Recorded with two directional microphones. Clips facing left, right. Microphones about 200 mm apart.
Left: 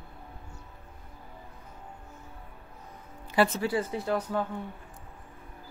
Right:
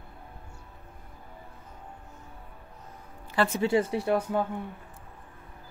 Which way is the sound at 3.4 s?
10° left (ahead or behind).